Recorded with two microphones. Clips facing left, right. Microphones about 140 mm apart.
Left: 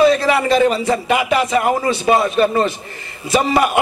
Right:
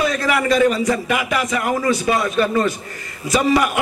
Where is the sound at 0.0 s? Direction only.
30° left (ahead or behind).